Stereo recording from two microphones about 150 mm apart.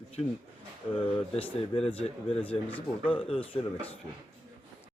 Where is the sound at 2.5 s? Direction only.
10° left (ahead or behind).